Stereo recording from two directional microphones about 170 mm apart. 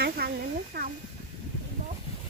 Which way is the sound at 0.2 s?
65° right (ahead or behind).